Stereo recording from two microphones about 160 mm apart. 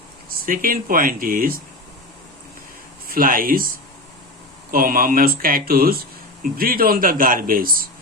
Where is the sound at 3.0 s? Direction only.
65° right (ahead or behind).